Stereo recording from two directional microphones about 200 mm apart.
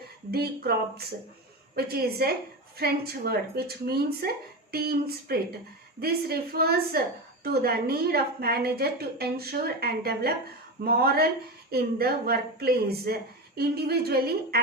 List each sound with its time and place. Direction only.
0.3 s a woman's voice: 50° right (ahead or behind)